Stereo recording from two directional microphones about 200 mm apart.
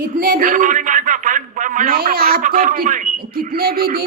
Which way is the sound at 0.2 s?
45° right (ahead or behind).